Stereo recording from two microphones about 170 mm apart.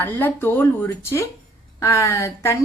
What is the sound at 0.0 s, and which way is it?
Speech, 10° left (ahead or behind).